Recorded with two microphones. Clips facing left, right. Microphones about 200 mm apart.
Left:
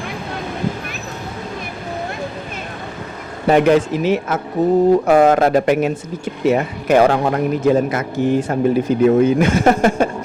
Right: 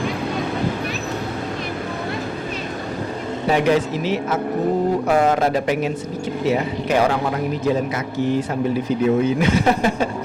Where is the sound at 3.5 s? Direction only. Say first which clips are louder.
Left 5 dB; 55° left (ahead or behind).